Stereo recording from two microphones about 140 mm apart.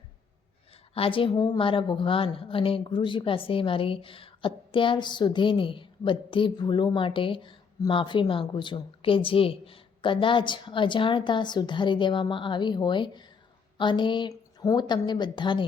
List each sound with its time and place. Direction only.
0.9 s a woman's voice: 40° left (ahead or behind)